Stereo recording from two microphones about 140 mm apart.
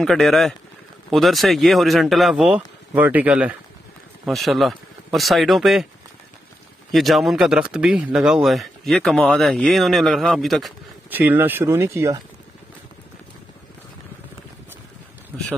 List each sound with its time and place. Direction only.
0.0 s speech: centre (ahead or behind)
6.9 s speech: centre (ahead or behind)
11.1 s speech: 15° right (ahead or behind)